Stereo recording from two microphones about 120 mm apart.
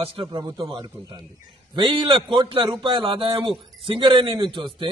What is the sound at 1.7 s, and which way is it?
A man's voice, 45° right (ahead or behind).